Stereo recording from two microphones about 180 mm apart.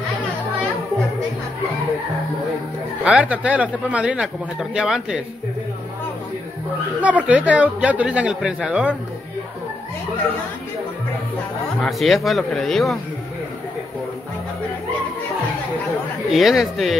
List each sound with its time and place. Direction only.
3.0 s a man's voice: 5° right (ahead or behind)
7.0 s a man's voice: 5° right (ahead or behind)
11.8 s speech: centre (ahead or behind)
16.3 s speech: centre (ahead or behind)